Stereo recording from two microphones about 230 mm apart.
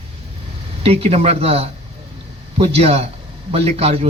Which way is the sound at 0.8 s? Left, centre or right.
Right.